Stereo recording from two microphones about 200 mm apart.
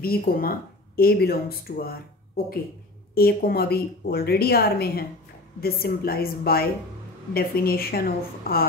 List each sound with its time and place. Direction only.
0.0 s a woman's voice: 50° left (ahead or behind)